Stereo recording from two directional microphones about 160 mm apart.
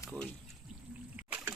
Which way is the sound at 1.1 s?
10° right (ahead or behind).